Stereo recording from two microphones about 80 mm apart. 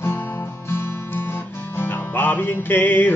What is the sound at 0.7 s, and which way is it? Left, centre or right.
Music, left.